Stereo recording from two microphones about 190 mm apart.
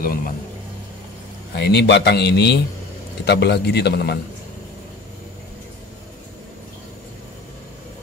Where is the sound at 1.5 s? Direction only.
60° left (ahead or behind).